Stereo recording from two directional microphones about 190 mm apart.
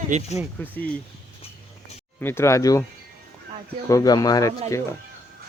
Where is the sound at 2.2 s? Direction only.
15° left (ahead or behind).